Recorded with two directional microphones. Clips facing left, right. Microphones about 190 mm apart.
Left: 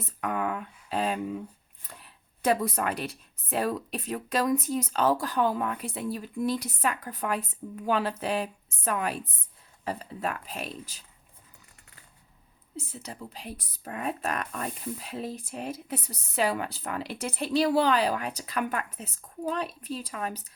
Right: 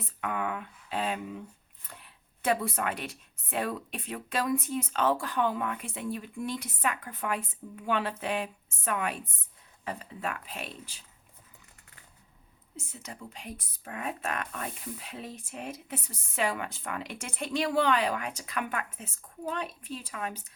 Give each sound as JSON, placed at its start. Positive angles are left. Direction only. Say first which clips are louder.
{"t": 0.2, "sound": "speech", "louder": "left 3 dB", "side_deg": 40}
{"t": 2.4, "sound": "speech", "louder": "left 3 dB", "side_deg": 40}
{"t": 12.7, "sound": "speech", "louder": "left 4 dB", "side_deg": 35}